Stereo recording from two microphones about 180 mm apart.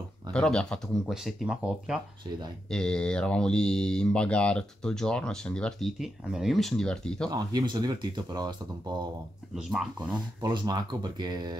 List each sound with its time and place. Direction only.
0.3 s speech: 5° left (ahead or behind)
7.2 s speech: 20° right (ahead or behind)
9.6 s speech: centre (ahead or behind)
9.9 s speech: 25° right (ahead or behind)